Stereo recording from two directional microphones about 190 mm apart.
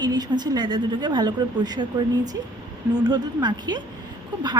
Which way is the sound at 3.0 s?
20° right (ahead or behind).